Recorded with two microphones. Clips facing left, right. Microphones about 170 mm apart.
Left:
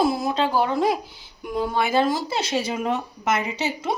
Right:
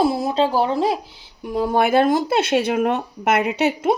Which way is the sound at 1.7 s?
55° right (ahead or behind).